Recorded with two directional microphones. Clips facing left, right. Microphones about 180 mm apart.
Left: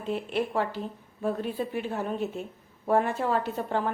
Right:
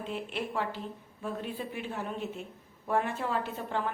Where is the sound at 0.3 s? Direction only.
45° left (ahead or behind).